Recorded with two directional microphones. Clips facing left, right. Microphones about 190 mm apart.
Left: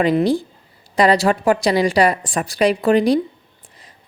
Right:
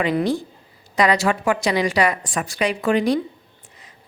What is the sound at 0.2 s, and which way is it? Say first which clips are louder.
A woman's voice: left 4 dB; 30° left (ahead or behind).